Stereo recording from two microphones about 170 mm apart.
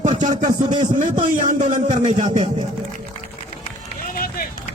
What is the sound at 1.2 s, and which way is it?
A man's voice, 50° right (ahead or behind).